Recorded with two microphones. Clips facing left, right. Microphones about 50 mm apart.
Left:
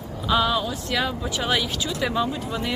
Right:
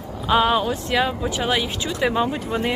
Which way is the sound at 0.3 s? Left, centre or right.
Right.